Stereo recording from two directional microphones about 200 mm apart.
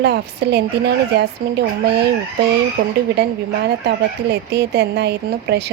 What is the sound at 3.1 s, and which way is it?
Speech, 55° right (ahead or behind).